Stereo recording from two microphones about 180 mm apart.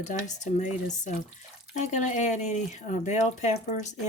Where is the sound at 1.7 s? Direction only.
40° left (ahead or behind).